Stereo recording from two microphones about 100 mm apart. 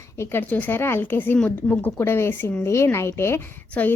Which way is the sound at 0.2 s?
25° left (ahead or behind).